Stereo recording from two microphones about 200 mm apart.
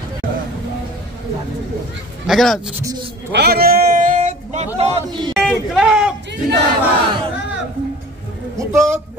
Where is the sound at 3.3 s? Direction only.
55° right (ahead or behind).